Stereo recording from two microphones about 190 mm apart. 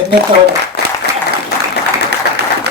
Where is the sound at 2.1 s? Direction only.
60° right (ahead or behind).